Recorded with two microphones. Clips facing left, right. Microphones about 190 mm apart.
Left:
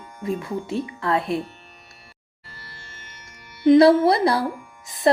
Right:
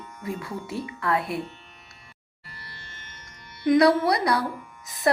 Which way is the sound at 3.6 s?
25° left (ahead or behind).